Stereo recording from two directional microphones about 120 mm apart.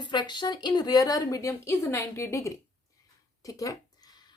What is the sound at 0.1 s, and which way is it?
A woman's voice, 40° left (ahead or behind).